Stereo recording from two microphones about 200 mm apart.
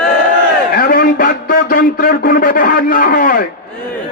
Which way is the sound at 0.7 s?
45° left (ahead or behind).